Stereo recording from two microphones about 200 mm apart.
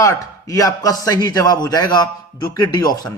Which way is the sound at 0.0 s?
15° left (ahead or behind).